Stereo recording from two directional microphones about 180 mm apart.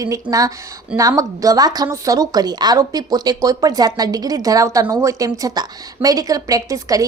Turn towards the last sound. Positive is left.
turn(degrees=-20)  # may be behind; listen again after turning